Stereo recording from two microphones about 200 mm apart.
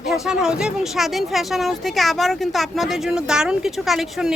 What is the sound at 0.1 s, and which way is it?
Speech, 5° right (ahead or behind).